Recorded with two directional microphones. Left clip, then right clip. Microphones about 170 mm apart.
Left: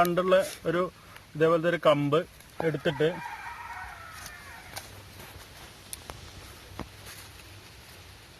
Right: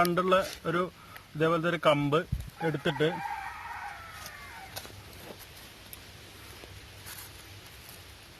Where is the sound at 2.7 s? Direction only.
15° left (ahead or behind).